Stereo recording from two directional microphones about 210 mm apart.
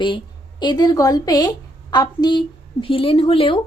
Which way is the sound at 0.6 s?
20° left (ahead or behind).